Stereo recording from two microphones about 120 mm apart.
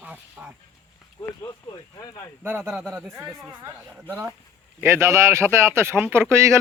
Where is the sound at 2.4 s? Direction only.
15° right (ahead or behind).